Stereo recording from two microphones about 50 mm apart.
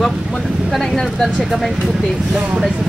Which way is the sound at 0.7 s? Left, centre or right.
Centre.